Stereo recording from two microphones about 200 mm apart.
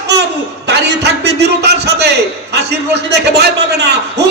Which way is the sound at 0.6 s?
55° right (ahead or behind).